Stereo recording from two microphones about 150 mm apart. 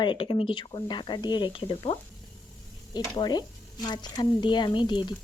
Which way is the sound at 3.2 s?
30° left (ahead or behind).